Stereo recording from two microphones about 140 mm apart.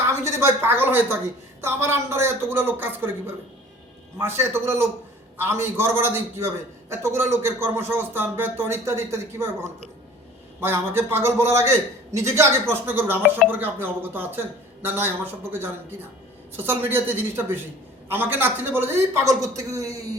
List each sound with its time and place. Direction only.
0.3 s a man's voice: 20° right (ahead or behind)